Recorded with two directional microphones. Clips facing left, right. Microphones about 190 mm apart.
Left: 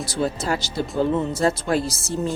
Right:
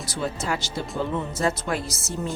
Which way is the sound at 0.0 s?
35° left (ahead or behind).